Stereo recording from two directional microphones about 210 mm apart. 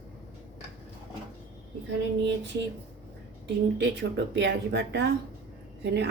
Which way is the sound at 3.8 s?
55° right (ahead or behind).